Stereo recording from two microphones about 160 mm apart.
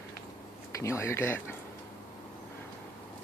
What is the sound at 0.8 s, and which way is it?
Speech, 15° left (ahead or behind).